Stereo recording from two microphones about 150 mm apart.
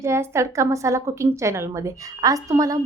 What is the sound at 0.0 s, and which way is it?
A woman's voice, 20° right (ahead or behind).